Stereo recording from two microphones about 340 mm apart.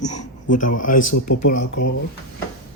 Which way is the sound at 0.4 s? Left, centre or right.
Left.